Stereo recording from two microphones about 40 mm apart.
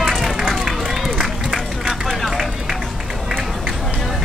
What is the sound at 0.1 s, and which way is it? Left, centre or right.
Run, centre.